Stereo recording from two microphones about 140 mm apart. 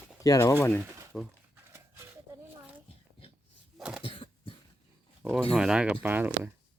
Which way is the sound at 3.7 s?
5° right (ahead or behind).